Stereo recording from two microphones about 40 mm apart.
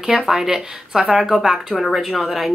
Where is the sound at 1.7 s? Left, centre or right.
Centre.